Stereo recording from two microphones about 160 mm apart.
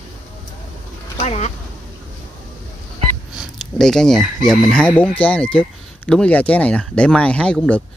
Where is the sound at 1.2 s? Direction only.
45° left (ahead or behind).